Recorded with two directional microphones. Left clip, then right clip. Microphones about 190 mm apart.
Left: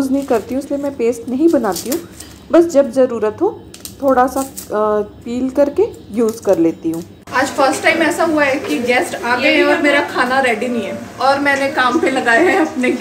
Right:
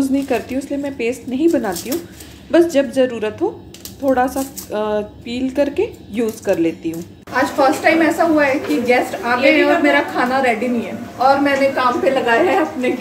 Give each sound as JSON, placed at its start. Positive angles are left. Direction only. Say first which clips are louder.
{"t": 0.0, "sound": "a woman's voice", "louder": "left 2 dB", "side_deg": 15}
{"t": 7.3, "sound": "a woman's voice", "louder": "left 1 dB", "side_deg": -5}